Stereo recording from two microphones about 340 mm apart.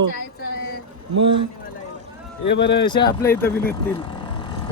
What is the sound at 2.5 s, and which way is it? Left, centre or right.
Speech, left.